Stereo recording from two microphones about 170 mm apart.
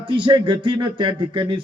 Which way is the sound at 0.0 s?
30° right (ahead or behind).